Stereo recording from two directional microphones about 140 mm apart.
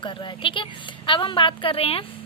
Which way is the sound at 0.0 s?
35° left (ahead or behind).